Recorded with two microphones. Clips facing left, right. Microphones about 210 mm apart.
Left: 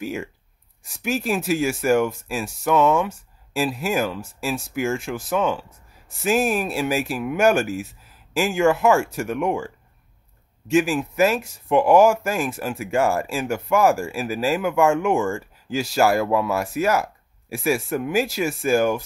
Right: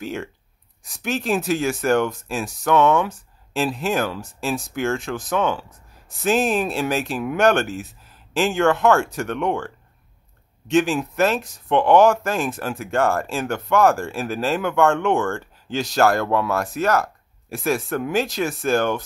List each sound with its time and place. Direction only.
0.0 s speech: 5° left (ahead or behind)
10.7 s speech: 5° left (ahead or behind)
15.1 s speech: centre (ahead or behind)
16.7 s a sound: 10° left (ahead or behind)
17.6 s speech: 10° left (ahead or behind)